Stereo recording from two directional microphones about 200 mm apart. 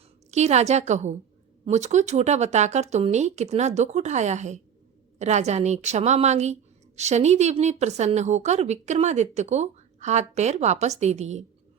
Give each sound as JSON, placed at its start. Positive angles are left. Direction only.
{"t": 0.3, "sound": "a woman's voice", "side_deg": -35}